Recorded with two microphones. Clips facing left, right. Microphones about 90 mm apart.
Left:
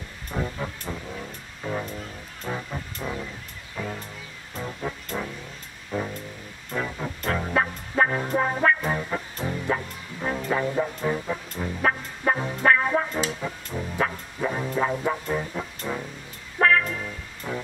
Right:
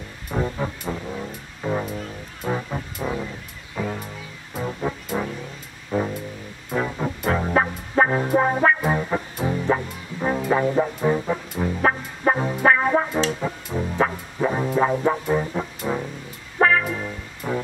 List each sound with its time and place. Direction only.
0.3 s music: 10° right (ahead or behind)